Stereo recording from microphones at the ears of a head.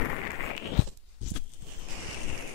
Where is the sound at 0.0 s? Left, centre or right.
Left.